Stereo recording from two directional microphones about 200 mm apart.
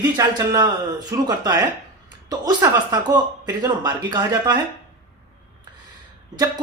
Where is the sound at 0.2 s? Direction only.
20° right (ahead or behind).